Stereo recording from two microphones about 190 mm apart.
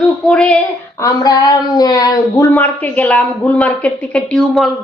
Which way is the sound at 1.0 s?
15° left (ahead or behind).